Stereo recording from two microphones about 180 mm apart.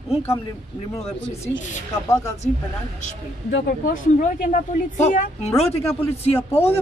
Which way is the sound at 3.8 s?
45° left (ahead or behind).